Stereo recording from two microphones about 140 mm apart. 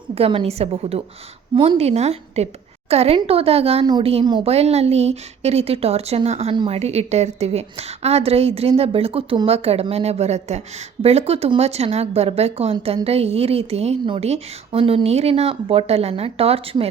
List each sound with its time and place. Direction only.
0.1 s a woman's voice: 45° right (ahead or behind)